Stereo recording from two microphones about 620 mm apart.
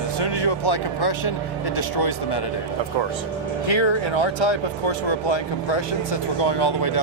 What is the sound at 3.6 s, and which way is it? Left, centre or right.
Speech, left.